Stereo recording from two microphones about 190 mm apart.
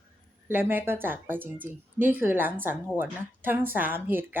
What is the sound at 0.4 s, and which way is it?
Speech, 10° right (ahead or behind).